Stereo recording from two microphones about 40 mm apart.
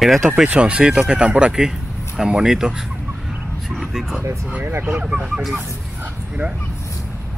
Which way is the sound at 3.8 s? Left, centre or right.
Centre.